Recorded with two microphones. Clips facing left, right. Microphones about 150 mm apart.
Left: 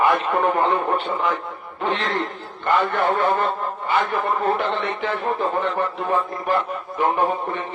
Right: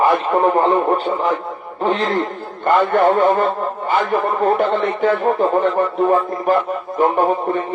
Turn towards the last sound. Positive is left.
turn(degrees=-40)  # may be behind; listen again after turning